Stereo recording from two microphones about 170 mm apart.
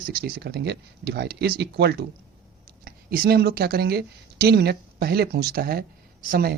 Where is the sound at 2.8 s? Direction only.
60° right (ahead or behind).